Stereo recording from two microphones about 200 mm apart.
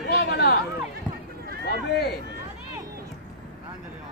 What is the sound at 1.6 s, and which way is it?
Speech, 55° left (ahead or behind).